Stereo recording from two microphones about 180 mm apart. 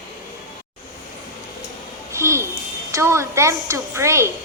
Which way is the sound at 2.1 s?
15° right (ahead or behind).